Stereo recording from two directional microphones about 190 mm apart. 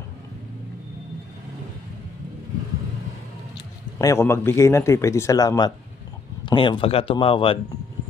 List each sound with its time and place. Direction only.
4.0 s a man's voice: 15° left (ahead or behind)